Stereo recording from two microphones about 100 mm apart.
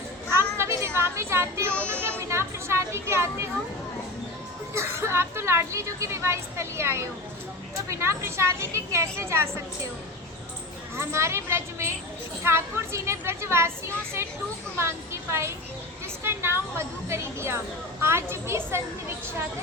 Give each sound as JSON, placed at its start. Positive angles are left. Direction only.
{"t": 0.3, "sound": "a sound", "side_deg": -25}
{"t": 1.9, "sound": "music", "side_deg": -25}
{"t": 4.7, "sound": "speech", "side_deg": -25}
{"t": 10.9, "sound": "speech", "side_deg": -25}